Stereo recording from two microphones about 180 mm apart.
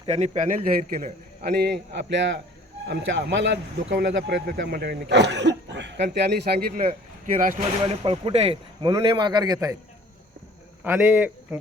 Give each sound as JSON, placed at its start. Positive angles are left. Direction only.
{"t": 0.0, "sound": "a man's voice", "side_deg": -40}
{"t": 4.6, "sound": "a man's voice", "side_deg": -60}
{"t": 8.0, "sound": "speech", "side_deg": -30}
{"t": 8.9, "sound": "a man's voice", "side_deg": -20}
{"t": 10.8, "sound": "a man's voice", "side_deg": -10}